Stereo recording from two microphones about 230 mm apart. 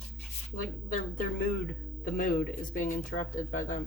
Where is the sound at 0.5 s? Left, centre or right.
Left.